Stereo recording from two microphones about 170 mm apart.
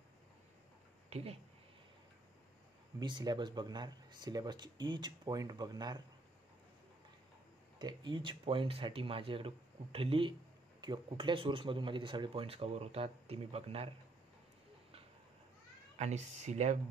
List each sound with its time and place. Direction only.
1.1 s speech: 35° right (ahead or behind)
3.0 s speech: 25° right (ahead or behind)
7.8 s speech: 25° right (ahead or behind)
16.0 s speech: 40° right (ahead or behind)